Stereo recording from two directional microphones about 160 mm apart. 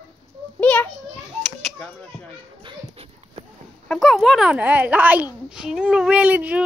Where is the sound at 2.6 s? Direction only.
35° right (ahead or behind).